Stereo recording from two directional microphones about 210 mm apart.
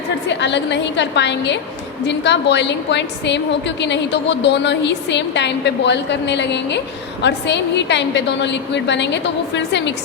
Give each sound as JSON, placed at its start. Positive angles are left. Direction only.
{"t": 0.3, "sound": "a woman's voice", "side_deg": 55}